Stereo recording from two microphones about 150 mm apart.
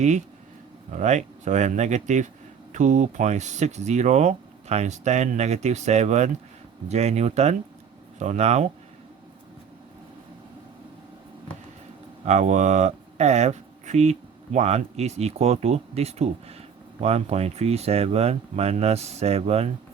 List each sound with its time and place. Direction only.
0.9 s speech: 55° right (ahead or behind)
12.2 s speech: 50° right (ahead or behind)